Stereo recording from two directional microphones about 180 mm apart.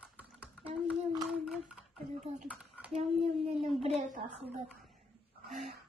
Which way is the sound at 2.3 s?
5° right (ahead or behind).